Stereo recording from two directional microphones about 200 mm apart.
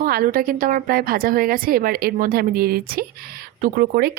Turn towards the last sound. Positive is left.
turn(degrees=-45)  # may be behind; listen again after turning